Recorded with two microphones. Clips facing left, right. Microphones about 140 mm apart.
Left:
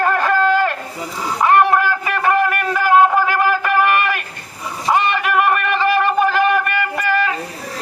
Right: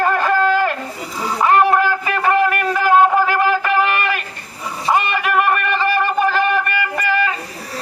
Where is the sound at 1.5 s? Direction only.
Centre (ahead or behind).